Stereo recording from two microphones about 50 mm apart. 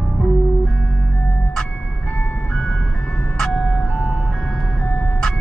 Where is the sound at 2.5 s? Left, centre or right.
Centre.